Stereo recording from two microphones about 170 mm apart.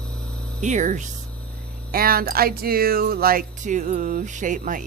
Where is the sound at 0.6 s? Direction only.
45° right (ahead or behind).